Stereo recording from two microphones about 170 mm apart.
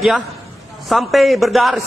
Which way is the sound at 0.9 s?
Centre (ahead or behind).